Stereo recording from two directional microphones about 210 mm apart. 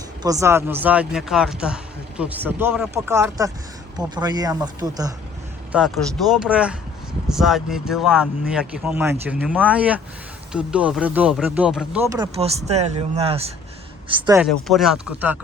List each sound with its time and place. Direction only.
0.2 s speech: 15° right (ahead or behind)
5.7 s speech: 5° right (ahead or behind)
12.0 s speech: 15° right (ahead or behind)
12.4 s speech: 30° right (ahead or behind)
14.2 s speech: 10° right (ahead or behind)
14.4 s speech: centre (ahead or behind)